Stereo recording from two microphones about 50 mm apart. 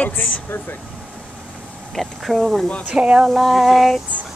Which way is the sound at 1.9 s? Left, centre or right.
Centre.